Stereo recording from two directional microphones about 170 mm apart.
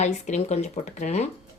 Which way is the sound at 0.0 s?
40° left (ahead or behind).